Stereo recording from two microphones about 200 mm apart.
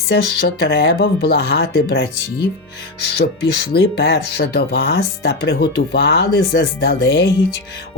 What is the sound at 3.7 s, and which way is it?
Speech, 55° left (ahead or behind).